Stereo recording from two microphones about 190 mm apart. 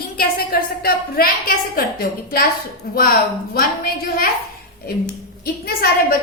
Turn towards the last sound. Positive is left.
turn(degrees=55)  # may be behind; listen again after turning